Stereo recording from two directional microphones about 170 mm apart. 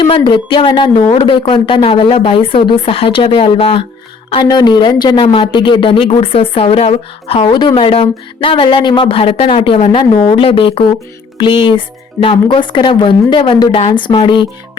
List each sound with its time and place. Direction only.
0.0 s speech: 25° left (ahead or behind)